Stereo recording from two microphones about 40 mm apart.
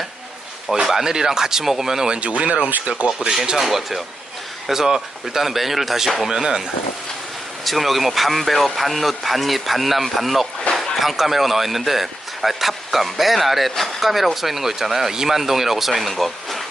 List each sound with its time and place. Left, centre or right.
0.9 s speech: centre
2.1 s speech: right
3.6 s speech: centre
6.2 s speech: centre
7.6 s speech: centre